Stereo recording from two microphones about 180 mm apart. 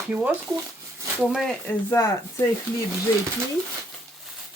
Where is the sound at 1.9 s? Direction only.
15° left (ahead or behind).